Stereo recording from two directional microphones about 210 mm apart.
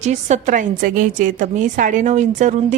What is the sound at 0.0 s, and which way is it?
A woman's voice, 35° right (ahead or behind).